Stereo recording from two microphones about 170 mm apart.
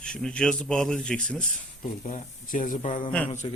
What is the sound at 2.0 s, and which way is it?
Speech, 50° left (ahead or behind).